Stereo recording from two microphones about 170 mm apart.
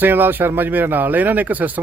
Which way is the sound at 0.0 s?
10° right (ahead or behind).